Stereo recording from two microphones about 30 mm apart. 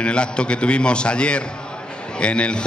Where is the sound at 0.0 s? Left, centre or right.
Left.